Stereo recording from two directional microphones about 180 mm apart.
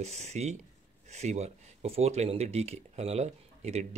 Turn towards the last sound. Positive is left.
turn(degrees=-35)  # may be behind; listen again after turning